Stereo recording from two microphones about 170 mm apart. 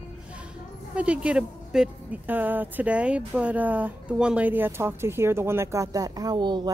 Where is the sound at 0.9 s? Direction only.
5° right (ahead or behind).